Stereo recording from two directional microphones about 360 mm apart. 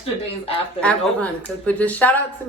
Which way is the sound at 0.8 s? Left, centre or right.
Centre.